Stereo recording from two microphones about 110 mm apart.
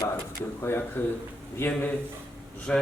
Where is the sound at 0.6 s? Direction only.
20° left (ahead or behind).